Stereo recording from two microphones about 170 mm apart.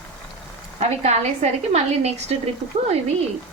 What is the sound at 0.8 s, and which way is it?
A woman's voice, 40° right (ahead or behind).